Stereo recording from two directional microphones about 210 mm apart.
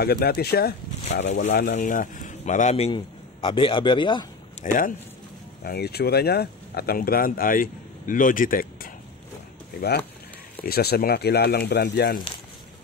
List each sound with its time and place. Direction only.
0.0 s speech: 45° left (ahead or behind)
1.2 s speech: 30° left (ahead or behind)
1.5 s speech: 50° left (ahead or behind)
1.8 s a man's voice: 40° left (ahead or behind); by 4.3 s 20° left (ahead or behind)
4.6 s speech: 35° left (ahead or behind)
5.6 s speech: 50° left (ahead or behind)